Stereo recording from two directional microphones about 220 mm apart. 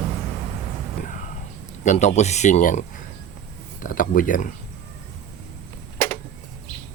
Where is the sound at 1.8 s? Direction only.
35° left (ahead or behind).